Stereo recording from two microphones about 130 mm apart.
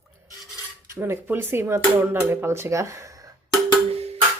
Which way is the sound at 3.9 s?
55° right (ahead or behind).